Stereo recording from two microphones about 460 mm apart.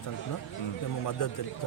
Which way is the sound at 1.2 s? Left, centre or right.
Left.